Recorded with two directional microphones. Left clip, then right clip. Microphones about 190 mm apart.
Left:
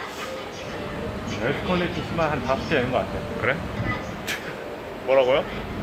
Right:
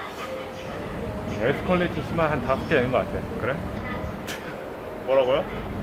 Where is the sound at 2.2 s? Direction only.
15° right (ahead or behind).